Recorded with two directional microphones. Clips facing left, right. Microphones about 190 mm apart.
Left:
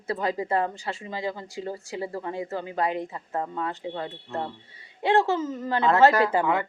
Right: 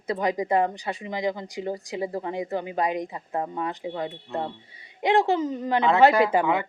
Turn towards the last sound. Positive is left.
turn(degrees=-15)  # may be behind; listen again after turning